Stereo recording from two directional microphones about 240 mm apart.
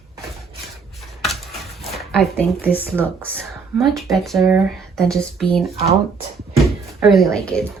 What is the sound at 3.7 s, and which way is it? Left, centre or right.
Speech, centre.